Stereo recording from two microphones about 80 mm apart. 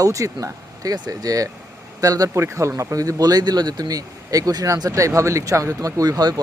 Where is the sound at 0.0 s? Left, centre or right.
Right.